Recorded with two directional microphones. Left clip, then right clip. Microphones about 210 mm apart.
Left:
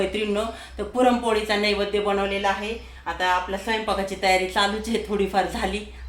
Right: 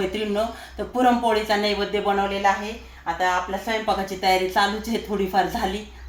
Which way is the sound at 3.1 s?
5° right (ahead or behind).